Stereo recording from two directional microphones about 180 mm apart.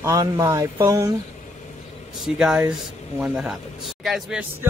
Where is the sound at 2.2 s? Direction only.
5° right (ahead or behind).